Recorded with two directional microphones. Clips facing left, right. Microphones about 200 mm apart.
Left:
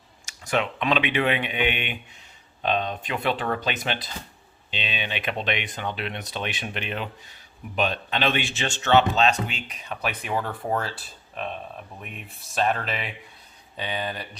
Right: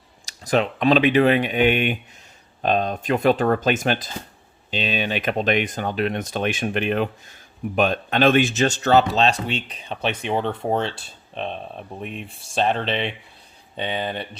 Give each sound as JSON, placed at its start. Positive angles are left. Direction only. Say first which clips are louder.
{"t": 0.3, "sound": "speech", "louder": "right 5 dB", "side_deg": -35}